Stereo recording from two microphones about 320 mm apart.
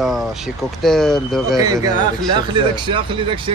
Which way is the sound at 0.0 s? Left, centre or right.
Centre.